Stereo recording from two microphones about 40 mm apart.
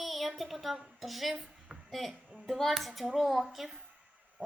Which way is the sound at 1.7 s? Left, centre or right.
Centre.